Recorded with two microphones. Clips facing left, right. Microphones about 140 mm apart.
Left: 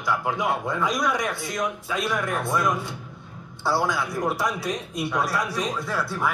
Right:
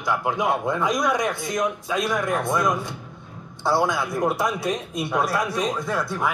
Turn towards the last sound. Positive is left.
turn(degrees=-20)  # may be behind; listen again after turning